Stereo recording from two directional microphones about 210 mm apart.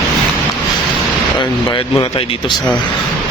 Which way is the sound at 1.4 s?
25° left (ahead or behind).